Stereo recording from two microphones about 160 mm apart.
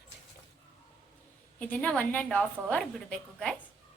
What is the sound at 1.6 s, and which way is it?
A woman's voice, 10° left (ahead or behind).